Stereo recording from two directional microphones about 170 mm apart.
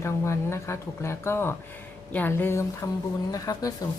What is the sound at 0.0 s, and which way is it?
A woman's voice, 15° left (ahead or behind).